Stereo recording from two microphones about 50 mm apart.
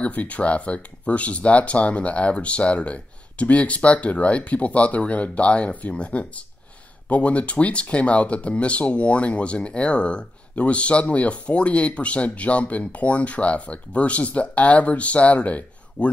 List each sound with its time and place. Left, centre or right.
0.0 s speech: left